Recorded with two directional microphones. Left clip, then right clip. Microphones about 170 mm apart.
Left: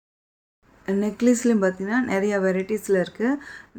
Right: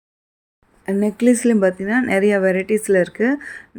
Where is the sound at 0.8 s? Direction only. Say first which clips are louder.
Right 5 dB; 25° right (ahead or behind).